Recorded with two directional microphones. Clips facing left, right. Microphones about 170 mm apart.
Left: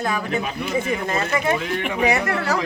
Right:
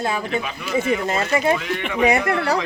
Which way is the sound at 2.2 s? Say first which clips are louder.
Right 2 dB; 35° left (ahead or behind).